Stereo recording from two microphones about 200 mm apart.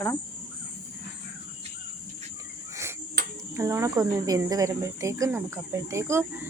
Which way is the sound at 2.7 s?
15° right (ahead or behind).